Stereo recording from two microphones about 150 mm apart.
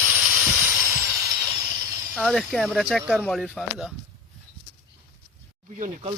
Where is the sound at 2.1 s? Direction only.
5° left (ahead or behind).